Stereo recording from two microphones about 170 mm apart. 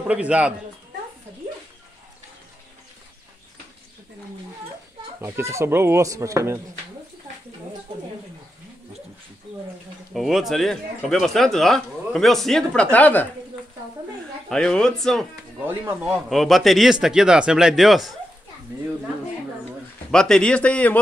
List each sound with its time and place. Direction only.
0.0 s speech: 10° right (ahead or behind)
5.2 s speech: 15° right (ahead or behind)
10.1 s a man's voice: centre (ahead or behind)
14.5 s speech: 5° left (ahead or behind)
15.6 s speech: 15° right (ahead or behind)
16.3 s speech: centre (ahead or behind)
20.1 s a man's voice: 5° left (ahead or behind)